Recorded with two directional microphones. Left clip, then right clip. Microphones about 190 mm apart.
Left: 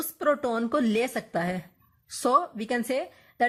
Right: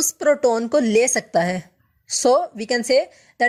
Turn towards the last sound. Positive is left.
turn(degrees=-30)  # may be behind; listen again after turning